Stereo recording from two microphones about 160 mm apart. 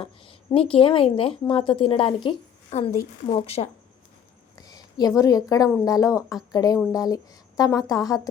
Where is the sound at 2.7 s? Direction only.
45° left (ahead or behind).